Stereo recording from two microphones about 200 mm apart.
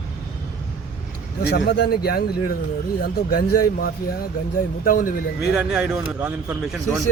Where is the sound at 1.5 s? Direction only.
55° left (ahead or behind).